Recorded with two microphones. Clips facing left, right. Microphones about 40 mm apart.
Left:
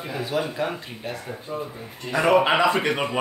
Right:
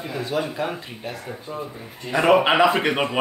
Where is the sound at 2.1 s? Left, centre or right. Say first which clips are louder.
Right 2 dB; centre.